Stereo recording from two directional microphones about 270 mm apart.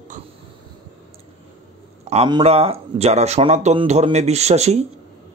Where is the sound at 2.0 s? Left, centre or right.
Centre.